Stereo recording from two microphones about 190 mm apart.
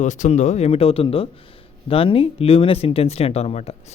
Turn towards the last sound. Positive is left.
turn(degrees=35)  # may be behind; listen again after turning